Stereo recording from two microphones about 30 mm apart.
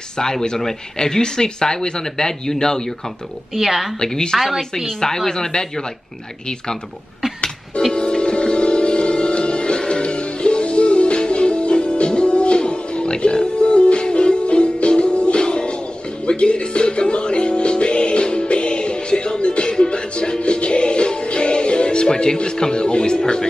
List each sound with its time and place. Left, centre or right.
0.2 s speech: left
3.5 s a woman's voice: centre
4.0 s speech: left
7.9 s music: left
22.0 s speech: left